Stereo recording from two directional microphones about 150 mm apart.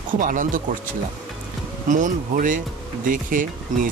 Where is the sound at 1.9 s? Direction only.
60° right (ahead or behind).